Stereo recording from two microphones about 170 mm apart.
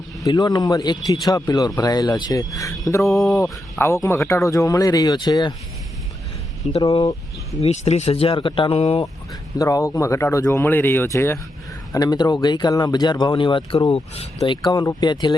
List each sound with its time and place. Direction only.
0.2 s speech: 20° left (ahead or behind)
3.0 s speech: centre (ahead or behind)
3.3 s speech: 15° left (ahead or behind)
6.9 s speech: 25° left (ahead or behind)
7.6 s speech: 40° left (ahead or behind)
9.6 s speech: 20° left (ahead or behind)